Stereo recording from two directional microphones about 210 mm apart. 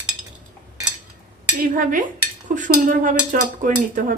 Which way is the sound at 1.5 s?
40° right (ahead or behind).